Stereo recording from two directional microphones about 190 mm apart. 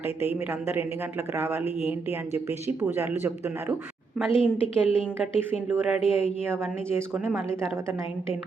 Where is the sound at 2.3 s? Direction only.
15° right (ahead or behind).